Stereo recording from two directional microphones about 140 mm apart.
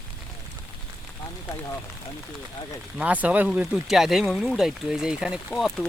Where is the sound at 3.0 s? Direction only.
10° right (ahead or behind).